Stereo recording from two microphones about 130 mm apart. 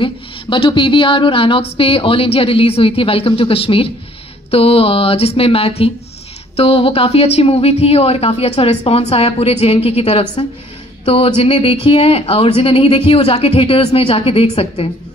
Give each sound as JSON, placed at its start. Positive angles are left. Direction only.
{"t": 0.0, "sound": "a woman's voice", "side_deg": 40}